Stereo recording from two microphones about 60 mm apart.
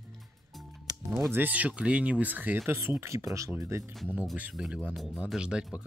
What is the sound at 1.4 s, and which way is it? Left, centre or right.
Speech, right.